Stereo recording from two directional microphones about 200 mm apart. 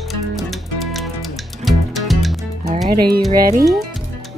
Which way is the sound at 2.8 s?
50° right (ahead or behind).